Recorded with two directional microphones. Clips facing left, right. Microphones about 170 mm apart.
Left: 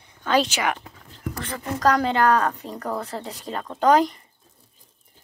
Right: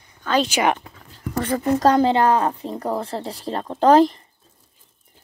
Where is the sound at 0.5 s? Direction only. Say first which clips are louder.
Right 6 dB; 20° right (ahead or behind).